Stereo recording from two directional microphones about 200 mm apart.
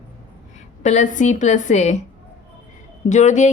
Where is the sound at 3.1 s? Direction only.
35° left (ahead or behind).